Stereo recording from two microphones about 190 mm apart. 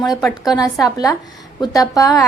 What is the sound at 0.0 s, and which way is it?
Speech, centre (ahead or behind).